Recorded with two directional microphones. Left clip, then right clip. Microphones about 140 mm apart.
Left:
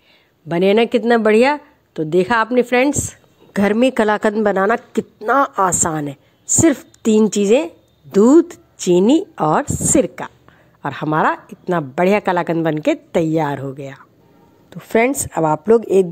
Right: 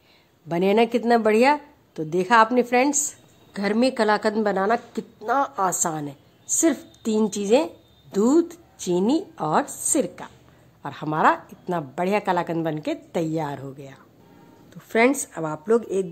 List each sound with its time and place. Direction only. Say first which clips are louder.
0.5 s a woman's voice: left 6 dB; 25° left (ahead or behind); by 16.1 s 40° left (ahead or behind)